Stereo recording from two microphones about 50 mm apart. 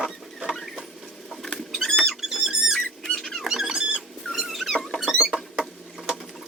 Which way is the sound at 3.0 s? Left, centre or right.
Centre.